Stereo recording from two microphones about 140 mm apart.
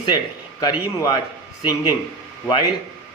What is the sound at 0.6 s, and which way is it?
Speech, 30° left (ahead or behind).